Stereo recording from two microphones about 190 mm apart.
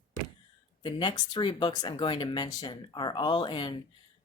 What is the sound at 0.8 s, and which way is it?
Speech, 25° left (ahead or behind).